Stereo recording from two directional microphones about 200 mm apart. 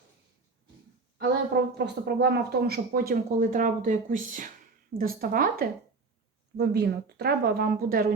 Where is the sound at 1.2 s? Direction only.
55° right (ahead or behind).